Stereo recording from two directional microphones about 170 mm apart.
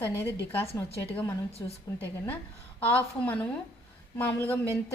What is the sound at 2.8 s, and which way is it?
A woman's voice, 10° left (ahead or behind).